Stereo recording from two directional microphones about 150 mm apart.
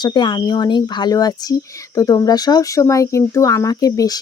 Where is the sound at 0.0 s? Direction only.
30° left (ahead or behind).